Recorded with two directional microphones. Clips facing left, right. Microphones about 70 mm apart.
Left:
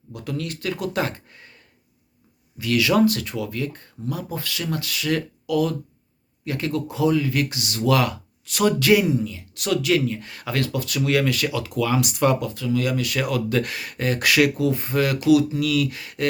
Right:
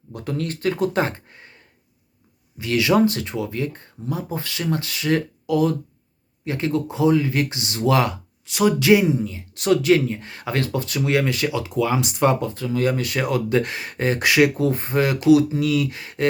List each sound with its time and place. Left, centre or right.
0.1 s speech: right